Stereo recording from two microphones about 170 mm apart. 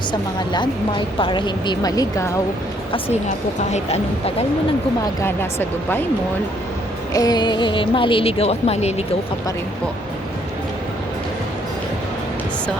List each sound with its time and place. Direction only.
0.1 s a woman's voice: 25° left (ahead or behind)
3.6 s speech: 40° left (ahead or behind)
5.2 s speech: 15° left (ahead or behind)
7.1 s a woman's voice: 20° left (ahead or behind); by 9.0 s 40° left (ahead or behind)